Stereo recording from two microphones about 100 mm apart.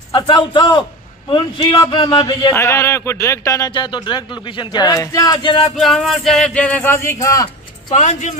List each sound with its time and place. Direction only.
0.1 s speech: 55° left (ahead or behind)
2.5 s speech: 30° left (ahead or behind)
3.7 s speech: 50° left (ahead or behind)
5.0 s speech: 40° left (ahead or behind)
5.6 s speech: centre (ahead or behind); by 7.4 s 30° left (ahead or behind)